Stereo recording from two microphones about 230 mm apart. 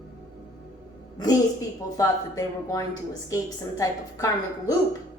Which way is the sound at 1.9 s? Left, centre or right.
Centre.